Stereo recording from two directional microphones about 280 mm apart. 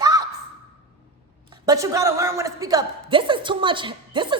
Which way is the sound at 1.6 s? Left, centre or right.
Centre.